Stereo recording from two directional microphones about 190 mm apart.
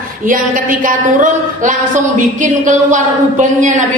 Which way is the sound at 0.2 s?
45° right (ahead or behind).